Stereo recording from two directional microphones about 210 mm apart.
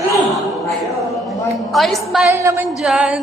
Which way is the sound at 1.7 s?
Centre (ahead or behind).